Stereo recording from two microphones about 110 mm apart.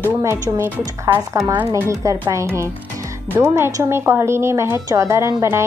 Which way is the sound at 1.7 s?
30° right (ahead or behind).